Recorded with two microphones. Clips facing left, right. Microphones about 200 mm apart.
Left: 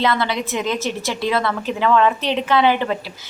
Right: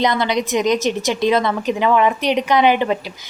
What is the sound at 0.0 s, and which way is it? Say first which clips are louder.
A woman's voice: right 2 dB; 15° right (ahead or behind).